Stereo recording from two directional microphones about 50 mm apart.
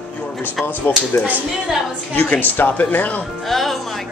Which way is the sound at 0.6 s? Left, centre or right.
Centre.